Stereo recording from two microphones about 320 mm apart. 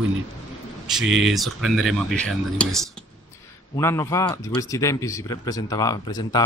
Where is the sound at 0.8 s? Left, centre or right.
Centre.